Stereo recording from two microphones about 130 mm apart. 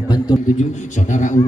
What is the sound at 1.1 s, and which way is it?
Speech, 70° left (ahead or behind).